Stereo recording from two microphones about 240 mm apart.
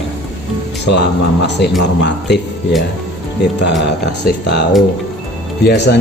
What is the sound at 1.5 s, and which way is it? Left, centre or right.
Speech, left.